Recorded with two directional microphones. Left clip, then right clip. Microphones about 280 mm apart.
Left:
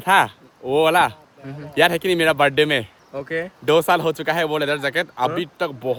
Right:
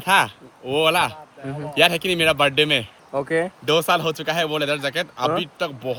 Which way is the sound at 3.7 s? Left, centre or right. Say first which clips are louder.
Left 4 dB; centre.